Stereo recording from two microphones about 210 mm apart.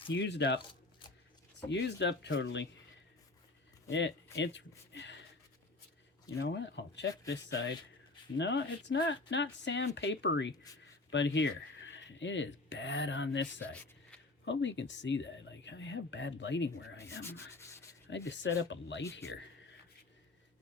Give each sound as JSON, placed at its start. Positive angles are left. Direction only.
{"t": 0.1, "sound": "speech", "side_deg": 55}
{"t": 1.7, "sound": "speech", "side_deg": 55}
{"t": 3.8, "sound": "speech", "side_deg": 60}
{"t": 4.9, "sound": "a sound", "side_deg": 60}
{"t": 6.4, "sound": "speech", "side_deg": 55}
{"t": 17.2, "sound": "sanding", "side_deg": 10}
{"t": 18.3, "sound": "speech", "side_deg": 60}